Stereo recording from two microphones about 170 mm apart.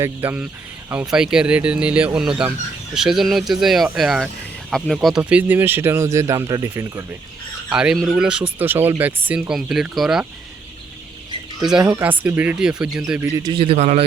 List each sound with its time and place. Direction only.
0.0 s speech: 10° right (ahead or behind)
7.7 s speech: 5° right (ahead or behind)
11.6 s speech: 5° right (ahead or behind)
13.3 s a man's voice: 25° right (ahead or behind)